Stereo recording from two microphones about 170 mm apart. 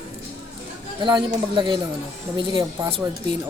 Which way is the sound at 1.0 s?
25° right (ahead or behind).